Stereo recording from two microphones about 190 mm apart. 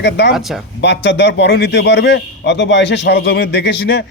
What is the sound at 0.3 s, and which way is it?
Speech, centre (ahead or behind).